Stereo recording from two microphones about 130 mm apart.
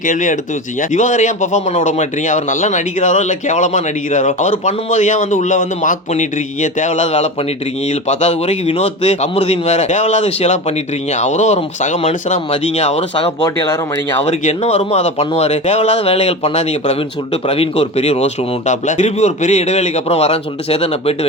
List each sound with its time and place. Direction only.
0.0 s speech: 85° left
0.8 s speech: 70° left (ahead or behind); by 13.1 s 55° left (ahead or behind)
13.4 s speech: 30° left (ahead or behind)
14.2 s speech: 55° left (ahead or behind)